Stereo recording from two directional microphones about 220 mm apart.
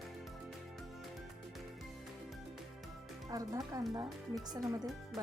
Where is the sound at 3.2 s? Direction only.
15° right (ahead or behind).